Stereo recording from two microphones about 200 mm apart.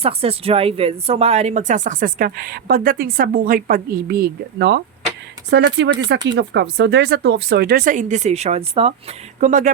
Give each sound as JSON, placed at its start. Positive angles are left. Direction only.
{"t": 0.0, "sound": "speech", "side_deg": -30}